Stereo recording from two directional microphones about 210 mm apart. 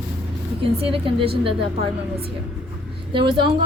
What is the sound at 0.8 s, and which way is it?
Speech, 25° right (ahead or behind).